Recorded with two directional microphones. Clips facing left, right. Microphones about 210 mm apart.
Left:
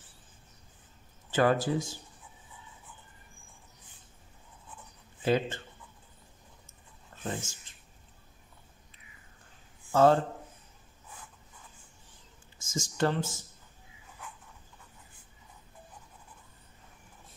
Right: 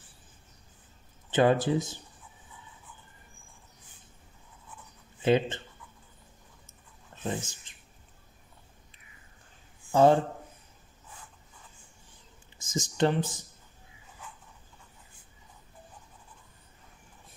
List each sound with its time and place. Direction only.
1.3 s speech: 20° right (ahead or behind)
5.2 s speech: 20° right (ahead or behind)
7.2 s speech: 20° right (ahead or behind)
9.9 s speech: 15° right (ahead or behind)
12.5 s speech: 20° right (ahead or behind)